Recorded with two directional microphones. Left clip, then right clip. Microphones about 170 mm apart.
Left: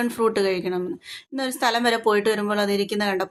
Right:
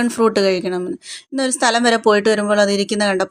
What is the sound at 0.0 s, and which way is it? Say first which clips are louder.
A woman's voice: right 6 dB; 35° right (ahead or behind).